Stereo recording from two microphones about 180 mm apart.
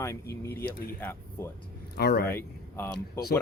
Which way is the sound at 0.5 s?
55° left (ahead or behind).